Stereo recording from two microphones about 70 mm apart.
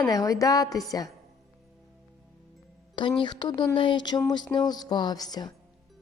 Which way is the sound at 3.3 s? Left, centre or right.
Left.